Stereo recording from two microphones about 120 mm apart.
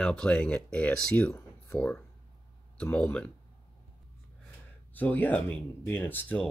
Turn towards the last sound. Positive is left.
turn(degrees=15)  # may be behind; listen again after turning